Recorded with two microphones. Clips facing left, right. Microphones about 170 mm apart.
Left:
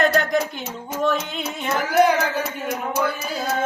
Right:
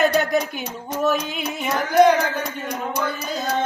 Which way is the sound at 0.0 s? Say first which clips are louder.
Right 1 dB; 5° right (ahead or behind).